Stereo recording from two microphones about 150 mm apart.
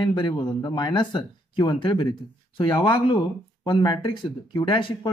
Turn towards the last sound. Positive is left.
turn(degrees=30)  # may be behind; listen again after turning